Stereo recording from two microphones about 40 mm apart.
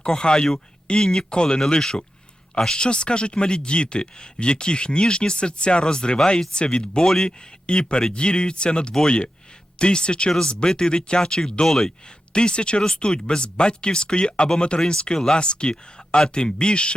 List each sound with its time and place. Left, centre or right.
0.0 s speech: centre
7.3 s speech: left
12.3 s speech: left